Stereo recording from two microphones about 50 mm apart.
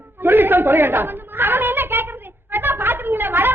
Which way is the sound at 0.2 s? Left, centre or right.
Right.